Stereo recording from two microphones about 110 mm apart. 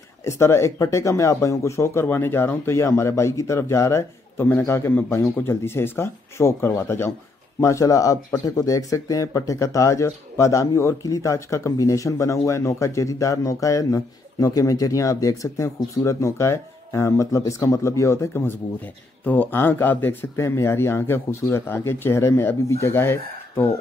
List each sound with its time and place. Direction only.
0.2 s speech: 25° left (ahead or behind)